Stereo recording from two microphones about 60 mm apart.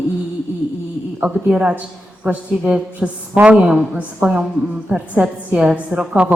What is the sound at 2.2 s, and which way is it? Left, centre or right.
Mantra, right.